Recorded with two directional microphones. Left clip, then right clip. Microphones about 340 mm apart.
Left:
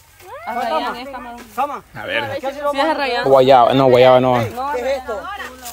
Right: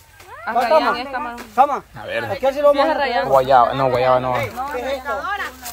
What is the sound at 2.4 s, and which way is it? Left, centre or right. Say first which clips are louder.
Speech: right 6 dB; right.